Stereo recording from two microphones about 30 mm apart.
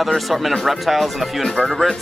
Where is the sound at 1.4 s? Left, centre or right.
Left.